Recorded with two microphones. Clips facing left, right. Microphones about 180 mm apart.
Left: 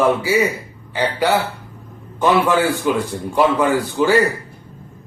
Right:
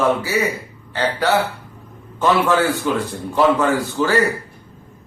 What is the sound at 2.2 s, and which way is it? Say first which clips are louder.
Speech: left 1 dB; 15° left (ahead or behind).